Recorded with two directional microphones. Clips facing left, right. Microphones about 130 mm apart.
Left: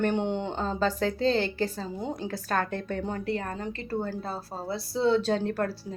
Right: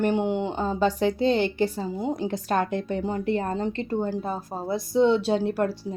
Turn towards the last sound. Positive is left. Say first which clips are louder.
# right 3 dB
turn(degrees=-10)  # may be behind; listen again after turning